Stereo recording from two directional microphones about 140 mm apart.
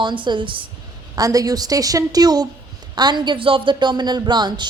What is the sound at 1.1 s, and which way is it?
A woman's voice, 25° right (ahead or behind).